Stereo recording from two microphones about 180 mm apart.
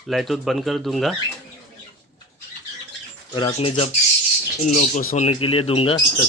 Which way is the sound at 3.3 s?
25° left (ahead or behind).